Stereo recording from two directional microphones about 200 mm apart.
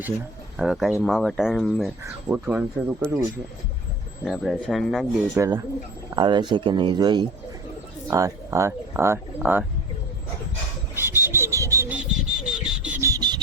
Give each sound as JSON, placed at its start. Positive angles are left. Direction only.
{"t": 0.6, "sound": "speech", "side_deg": 0}
{"t": 3.0, "sound": "speech", "side_deg": 5}
{"t": 4.3, "sound": "speech", "side_deg": 0}
{"t": 5.4, "sound": "speech", "side_deg": -15}
{"t": 10.9, "sound": "bird", "side_deg": -10}